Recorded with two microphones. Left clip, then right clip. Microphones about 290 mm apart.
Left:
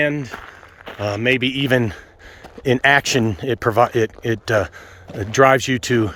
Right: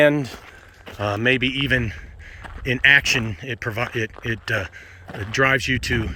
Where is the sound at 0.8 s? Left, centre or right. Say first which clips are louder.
Left 1 dB; centre.